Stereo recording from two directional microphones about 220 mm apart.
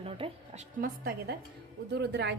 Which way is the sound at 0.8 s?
45° right (ahead or behind).